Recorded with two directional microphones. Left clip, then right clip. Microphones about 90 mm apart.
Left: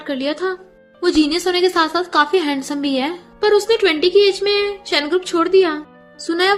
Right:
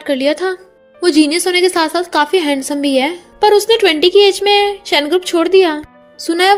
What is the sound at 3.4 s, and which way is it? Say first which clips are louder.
A woman's voice: right 5 dB; 40° right (ahead or behind).